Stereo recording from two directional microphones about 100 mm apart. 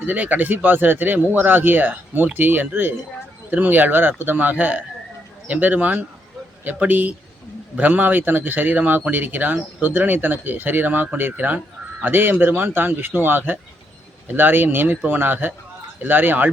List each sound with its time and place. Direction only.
0.0 s speech: 20° right (ahead or behind)